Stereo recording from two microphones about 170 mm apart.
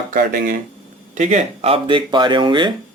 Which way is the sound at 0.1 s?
55° right (ahead or behind).